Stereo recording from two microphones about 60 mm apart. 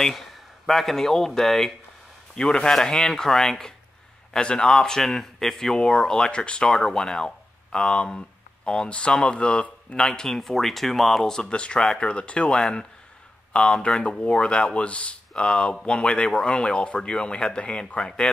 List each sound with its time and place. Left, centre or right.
0.0 s a man's voice: centre
12.5 s a man's voice: centre